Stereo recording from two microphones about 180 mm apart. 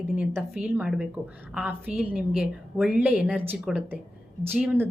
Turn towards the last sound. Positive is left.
turn(degrees=-10)  # may be behind; listen again after turning